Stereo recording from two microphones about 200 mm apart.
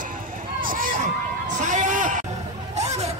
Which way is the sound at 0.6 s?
45° right (ahead or behind).